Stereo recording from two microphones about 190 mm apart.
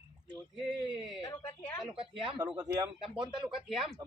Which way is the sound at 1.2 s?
15° left (ahead or behind).